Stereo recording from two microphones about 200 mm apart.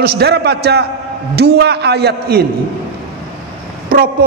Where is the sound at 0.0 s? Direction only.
55° right (ahead or behind).